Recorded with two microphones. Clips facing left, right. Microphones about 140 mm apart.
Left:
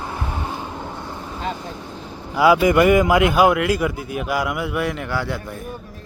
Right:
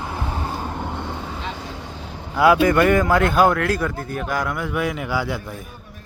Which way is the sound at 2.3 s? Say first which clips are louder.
Left 1 dB; 5° left (ahead or behind).